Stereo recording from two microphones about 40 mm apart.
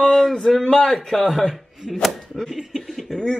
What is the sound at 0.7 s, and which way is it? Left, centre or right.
A man's voice, left.